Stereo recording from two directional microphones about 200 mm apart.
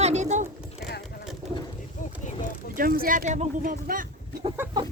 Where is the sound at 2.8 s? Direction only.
45° right (ahead or behind).